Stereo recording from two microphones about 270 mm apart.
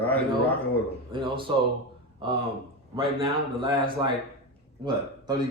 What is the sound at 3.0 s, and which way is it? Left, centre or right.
Speech, centre.